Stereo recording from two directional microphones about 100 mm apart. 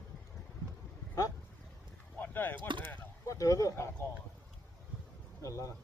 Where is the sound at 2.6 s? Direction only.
50° right (ahead or behind).